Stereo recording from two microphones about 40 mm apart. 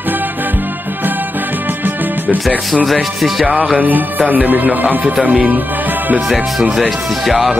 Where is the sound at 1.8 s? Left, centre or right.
Right.